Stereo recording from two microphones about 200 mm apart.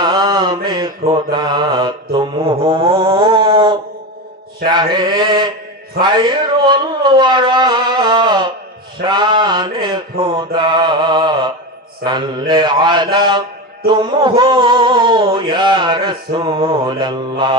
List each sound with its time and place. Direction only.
0.0 s mantra: 20° right (ahead or behind)
2.6 s male singing: 25° right (ahead or behind)